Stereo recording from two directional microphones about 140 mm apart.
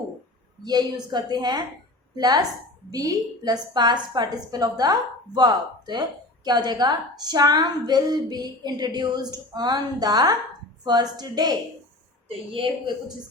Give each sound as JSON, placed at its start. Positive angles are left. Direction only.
{"t": 0.6, "sound": "a woman's voice", "side_deg": -30}
{"t": 12.5, "sound": "a woman's voice", "side_deg": -40}